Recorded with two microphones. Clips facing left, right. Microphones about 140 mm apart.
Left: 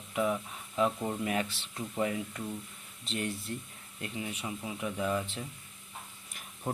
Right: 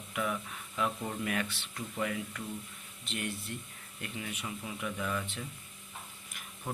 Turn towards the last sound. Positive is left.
turn(degrees=30)  # may be behind; listen again after turning